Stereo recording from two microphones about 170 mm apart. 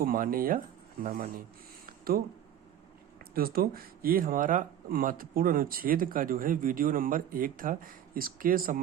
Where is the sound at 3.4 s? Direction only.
60° right (ahead or behind).